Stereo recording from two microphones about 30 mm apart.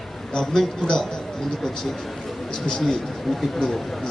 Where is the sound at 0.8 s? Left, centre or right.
Left.